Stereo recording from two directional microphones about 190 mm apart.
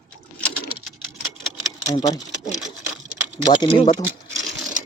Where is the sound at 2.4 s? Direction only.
Centre (ahead or behind).